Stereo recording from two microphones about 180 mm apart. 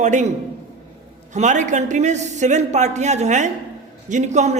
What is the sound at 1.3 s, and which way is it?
A man's voice, 40° right (ahead or behind).